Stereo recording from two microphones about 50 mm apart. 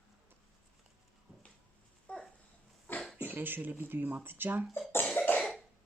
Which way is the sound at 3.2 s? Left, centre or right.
Right.